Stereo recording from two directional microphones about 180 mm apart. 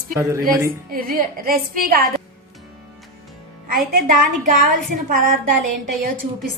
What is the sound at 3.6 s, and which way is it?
Speech, 55° right (ahead or behind).